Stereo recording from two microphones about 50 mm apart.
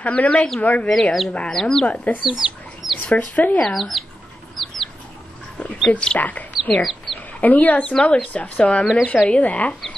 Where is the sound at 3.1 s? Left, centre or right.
Left.